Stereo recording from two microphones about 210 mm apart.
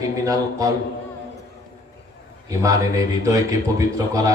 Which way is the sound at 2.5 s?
15° right (ahead or behind).